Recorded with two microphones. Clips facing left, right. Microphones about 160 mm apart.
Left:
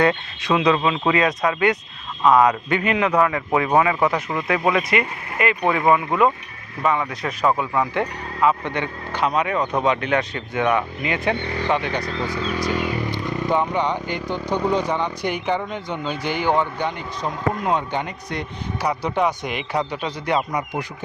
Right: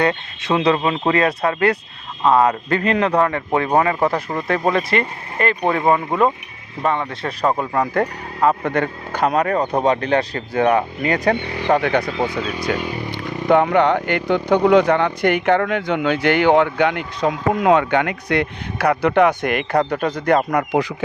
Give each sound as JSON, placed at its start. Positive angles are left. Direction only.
{"t": 0.1, "sound": "speech", "side_deg": -30}
{"t": 7.6, "sound": "speech", "side_deg": -45}
{"t": 11.3, "sound": "speech", "side_deg": -15}
{"t": 11.7, "sound": "speech", "side_deg": -55}